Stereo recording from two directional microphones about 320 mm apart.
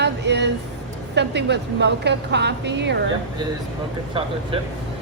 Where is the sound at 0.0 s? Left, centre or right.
Right.